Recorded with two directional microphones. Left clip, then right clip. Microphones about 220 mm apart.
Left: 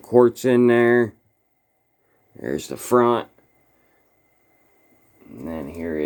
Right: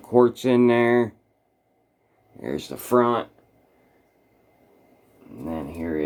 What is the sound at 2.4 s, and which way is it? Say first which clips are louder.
Speech: left 3 dB; 30° left (ahead or behind).